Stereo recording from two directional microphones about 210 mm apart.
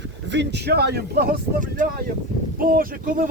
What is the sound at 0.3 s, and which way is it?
Speech, 55° right (ahead or behind).